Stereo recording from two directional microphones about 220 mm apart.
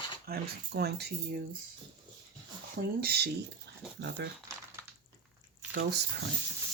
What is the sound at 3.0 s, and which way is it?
Speech, 45° right (ahead or behind).